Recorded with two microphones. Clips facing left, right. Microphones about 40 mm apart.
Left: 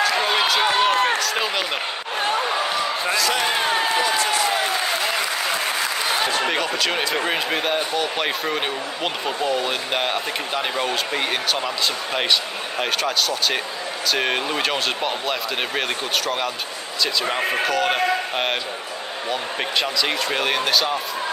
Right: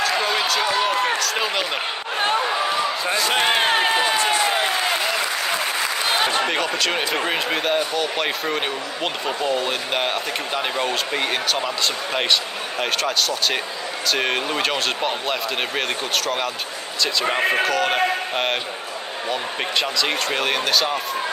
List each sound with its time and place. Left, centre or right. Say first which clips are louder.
0.6 s run: left 2 dB; left
1.2 s speech: even; centre
3.1 s run: right 2 dB; right
6.4 s speech: even; centre
17.0 s speech: right 2 dB; centre